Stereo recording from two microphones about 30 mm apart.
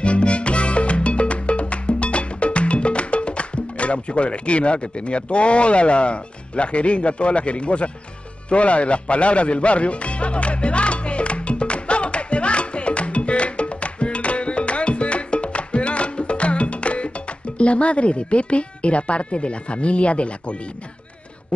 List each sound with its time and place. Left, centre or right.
0.0 s music: left